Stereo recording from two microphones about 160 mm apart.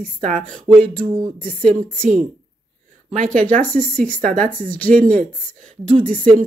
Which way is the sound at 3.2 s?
55° right (ahead or behind).